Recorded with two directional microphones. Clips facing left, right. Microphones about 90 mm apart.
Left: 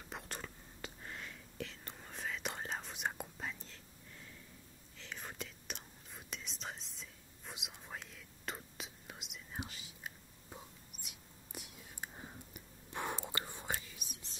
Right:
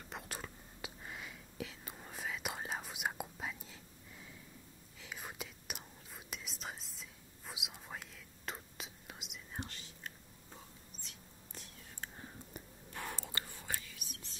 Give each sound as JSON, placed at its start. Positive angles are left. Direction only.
{"t": 0.1, "sound": "whispering", "side_deg": 0}